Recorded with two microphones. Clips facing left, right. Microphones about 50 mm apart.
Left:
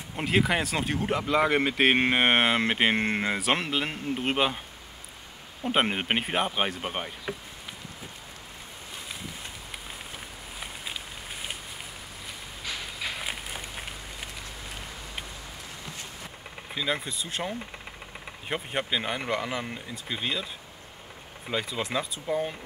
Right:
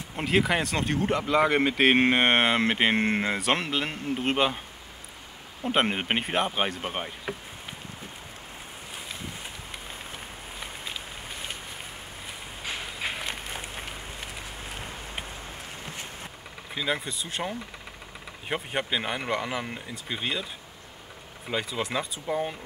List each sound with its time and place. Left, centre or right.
0.1 s speech: centre
5.6 s speech: centre
12.6 s a sound: right
13.2 s run: centre
16.7 s speech: centre
21.5 s speech: centre